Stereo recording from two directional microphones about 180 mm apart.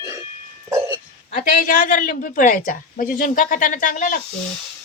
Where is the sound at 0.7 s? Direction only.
15° right (ahead or behind).